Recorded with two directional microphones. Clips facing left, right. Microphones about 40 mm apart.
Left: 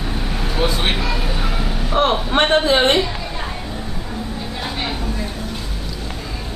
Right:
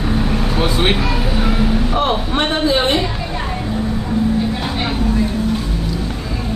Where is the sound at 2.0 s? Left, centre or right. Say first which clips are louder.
Left 5 dB; left.